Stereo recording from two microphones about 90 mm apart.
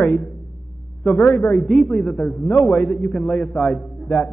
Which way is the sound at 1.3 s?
15° left (ahead or behind).